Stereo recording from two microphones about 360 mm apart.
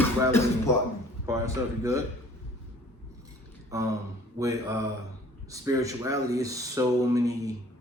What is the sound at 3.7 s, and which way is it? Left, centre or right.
A man's voice, centre.